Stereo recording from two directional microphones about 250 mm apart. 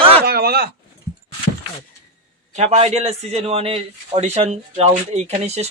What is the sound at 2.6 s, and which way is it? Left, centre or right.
Speech, right.